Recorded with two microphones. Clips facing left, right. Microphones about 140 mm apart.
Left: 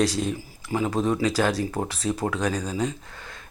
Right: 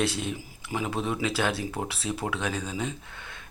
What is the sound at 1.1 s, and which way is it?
Speech, 5° right (ahead or behind).